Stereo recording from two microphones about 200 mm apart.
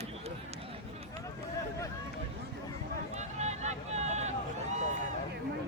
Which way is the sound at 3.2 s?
35° right (ahead or behind).